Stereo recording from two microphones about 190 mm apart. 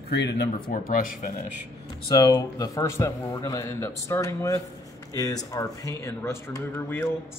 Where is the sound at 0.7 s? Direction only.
45° left (ahead or behind).